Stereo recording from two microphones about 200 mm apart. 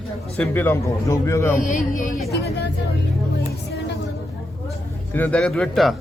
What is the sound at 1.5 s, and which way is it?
Speech, 40° left (ahead or behind).